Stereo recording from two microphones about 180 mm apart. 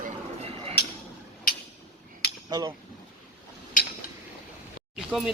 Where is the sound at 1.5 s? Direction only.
50° left (ahead or behind).